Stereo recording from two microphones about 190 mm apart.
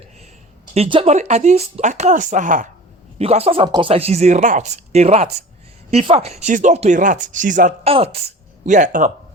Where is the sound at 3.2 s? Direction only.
35° right (ahead or behind).